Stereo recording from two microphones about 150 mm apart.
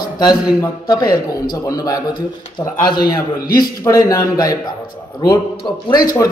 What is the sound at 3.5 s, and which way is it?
Speech, 25° left (ahead or behind).